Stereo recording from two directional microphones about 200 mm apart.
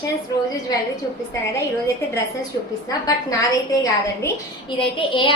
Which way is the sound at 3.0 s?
15° left (ahead or behind).